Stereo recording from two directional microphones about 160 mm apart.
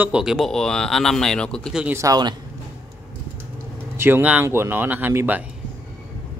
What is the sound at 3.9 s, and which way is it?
Speech, 15° right (ahead or behind).